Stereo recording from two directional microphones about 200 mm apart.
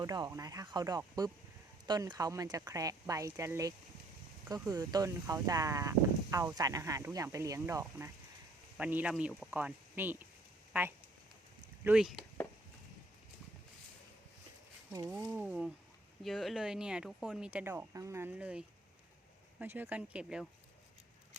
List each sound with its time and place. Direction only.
0.0 s speech: 15° right (ahead or behind); by 12.2 s centre (ahead or behind)
15.3 s speech: 5° right (ahead or behind)